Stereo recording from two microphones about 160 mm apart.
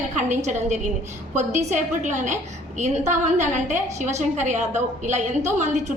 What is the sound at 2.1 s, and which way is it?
A woman's voice, 50° right (ahead or behind).